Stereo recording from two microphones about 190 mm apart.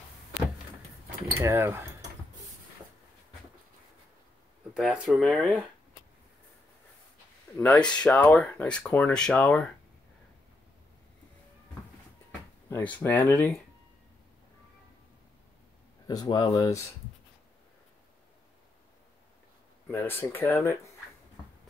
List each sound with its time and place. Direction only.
1.4 s speech: 15° right (ahead or behind)
4.7 s speech: 5° right (ahead or behind)
7.5 s speech: 10° left (ahead or behind)
12.6 s speech: 10° left (ahead or behind)
16.1 s speech: 20° left (ahead or behind)
19.9 s speech: 10° left (ahead or behind)